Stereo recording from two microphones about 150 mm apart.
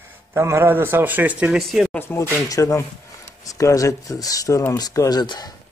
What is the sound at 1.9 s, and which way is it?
Speech, 15° left (ahead or behind).